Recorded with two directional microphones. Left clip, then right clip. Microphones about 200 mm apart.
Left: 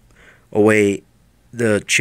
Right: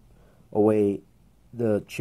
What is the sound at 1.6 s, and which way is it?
Speech, 45° left (ahead or behind).